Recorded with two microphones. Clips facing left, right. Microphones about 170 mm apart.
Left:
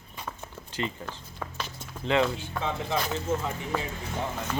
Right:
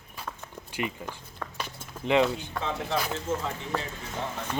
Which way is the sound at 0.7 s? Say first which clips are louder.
Even; 10° right (ahead or behind).